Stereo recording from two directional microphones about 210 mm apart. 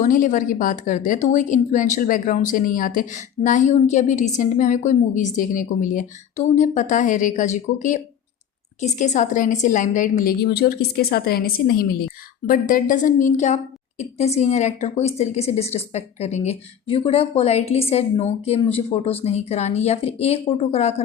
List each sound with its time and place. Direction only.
0.0 s a woman's voice: 40° left (ahead or behind)